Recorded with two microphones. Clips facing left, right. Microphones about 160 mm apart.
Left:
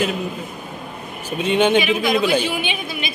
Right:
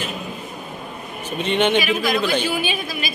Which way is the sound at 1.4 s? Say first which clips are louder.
Left 2 dB; 5° left (ahead or behind).